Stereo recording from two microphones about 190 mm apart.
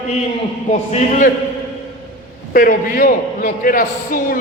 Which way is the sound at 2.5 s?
45° left (ahead or behind).